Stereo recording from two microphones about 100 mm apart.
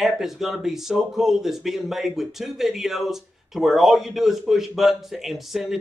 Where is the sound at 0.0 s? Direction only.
5° right (ahead or behind).